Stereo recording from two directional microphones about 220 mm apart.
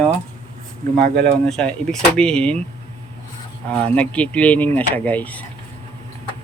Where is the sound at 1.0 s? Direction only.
45° right (ahead or behind).